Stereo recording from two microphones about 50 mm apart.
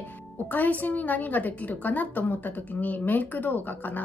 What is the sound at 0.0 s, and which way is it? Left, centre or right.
A woman's voice, left.